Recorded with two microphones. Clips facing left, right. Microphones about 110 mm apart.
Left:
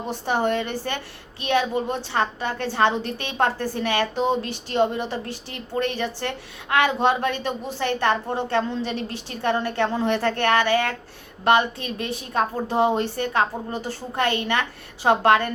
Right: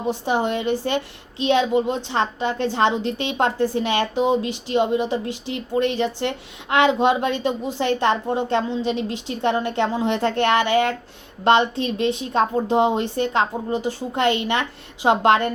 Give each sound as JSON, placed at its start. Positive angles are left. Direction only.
{"t": 0.3, "sound": "a woman's voice", "side_deg": -15}